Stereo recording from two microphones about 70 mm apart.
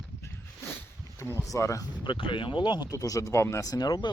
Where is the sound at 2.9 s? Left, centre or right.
Left.